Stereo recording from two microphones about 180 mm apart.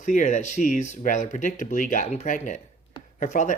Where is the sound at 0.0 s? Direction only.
40° left (ahead or behind).